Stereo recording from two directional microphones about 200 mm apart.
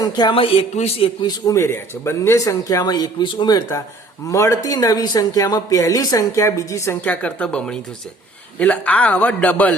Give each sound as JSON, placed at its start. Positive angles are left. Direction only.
{"t": 0.0, "sound": "a man's voice", "side_deg": 20}